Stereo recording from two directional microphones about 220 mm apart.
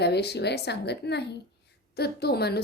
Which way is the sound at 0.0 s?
50° left (ahead or behind).